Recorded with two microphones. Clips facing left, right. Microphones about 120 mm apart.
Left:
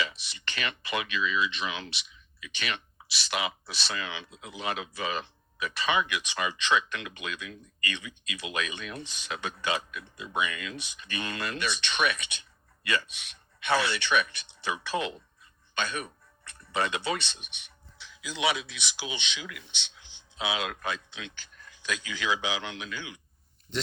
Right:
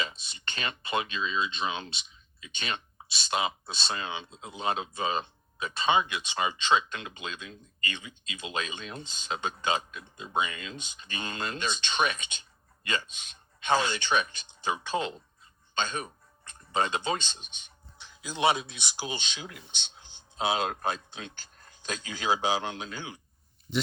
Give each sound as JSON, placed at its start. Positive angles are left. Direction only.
{"t": 0.3, "sound": "speech", "side_deg": -30}
{"t": 18.2, "sound": "speech", "side_deg": -45}
{"t": 23.7, "sound": "speech", "side_deg": -5}